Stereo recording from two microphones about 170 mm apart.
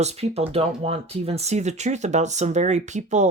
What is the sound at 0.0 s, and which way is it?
Speech, 40° right (ahead or behind).